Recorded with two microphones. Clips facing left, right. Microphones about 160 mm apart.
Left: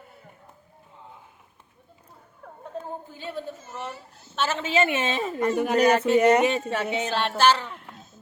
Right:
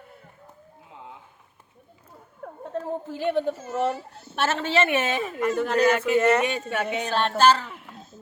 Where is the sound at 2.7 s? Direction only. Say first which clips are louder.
Right 6 dB; 85° right; by 4.6 s 65° right (ahead or behind).